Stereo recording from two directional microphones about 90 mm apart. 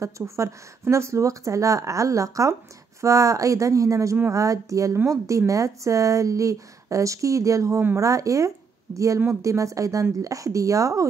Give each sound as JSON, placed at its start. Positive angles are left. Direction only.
{"t": 0.0, "sound": "speech", "side_deg": -35}